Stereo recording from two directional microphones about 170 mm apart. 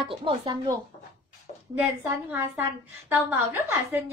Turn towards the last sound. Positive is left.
turn(degrees=-10)  # may be behind; listen again after turning